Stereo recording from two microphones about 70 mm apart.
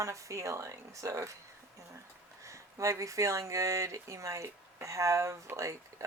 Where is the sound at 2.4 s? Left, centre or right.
Right.